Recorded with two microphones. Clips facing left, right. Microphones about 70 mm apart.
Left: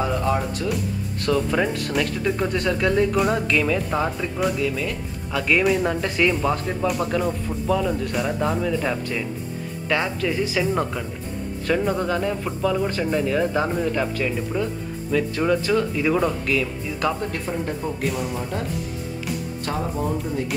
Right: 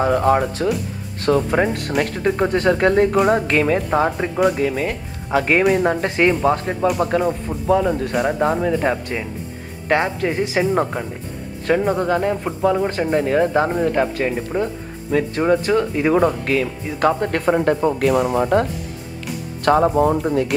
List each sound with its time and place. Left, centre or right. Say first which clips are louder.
0.0 s speech: right 7 dB; right
1.2 s speech: right 4 dB; right
8.0 s speech: right 5 dB; right
8.3 s speech: right 5 dB; right